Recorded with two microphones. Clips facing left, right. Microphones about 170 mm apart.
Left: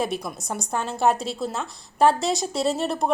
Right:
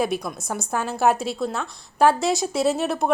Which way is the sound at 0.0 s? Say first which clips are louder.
Right 3 dB; centre (ahead or behind).